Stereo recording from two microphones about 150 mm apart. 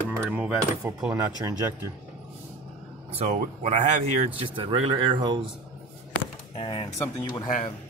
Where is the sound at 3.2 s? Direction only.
50° right (ahead or behind).